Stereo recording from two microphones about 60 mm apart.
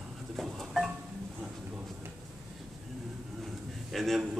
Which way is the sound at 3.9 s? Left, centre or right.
Centre.